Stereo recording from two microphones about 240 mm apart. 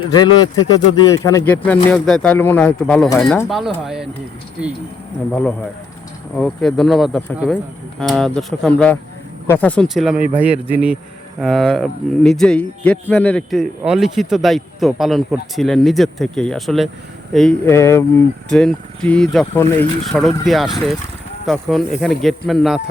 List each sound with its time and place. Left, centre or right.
0.1 s speech: centre
5.3 s a man's voice: centre